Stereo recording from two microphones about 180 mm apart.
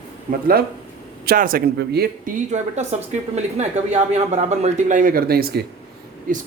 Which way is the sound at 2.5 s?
40° right (ahead or behind).